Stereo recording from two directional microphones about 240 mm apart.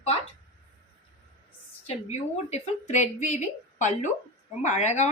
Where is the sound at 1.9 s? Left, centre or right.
Left.